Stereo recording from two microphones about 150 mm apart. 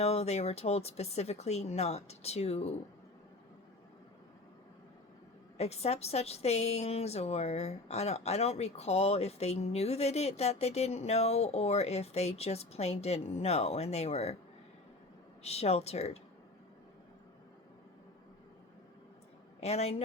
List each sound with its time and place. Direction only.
0.0 s a woman's voice: 45° left (ahead or behind)
5.5 s a woman's voice: 45° left (ahead or behind)
15.4 s a woman's voice: 45° left (ahead or behind)
19.5 s speech: 45° left (ahead or behind)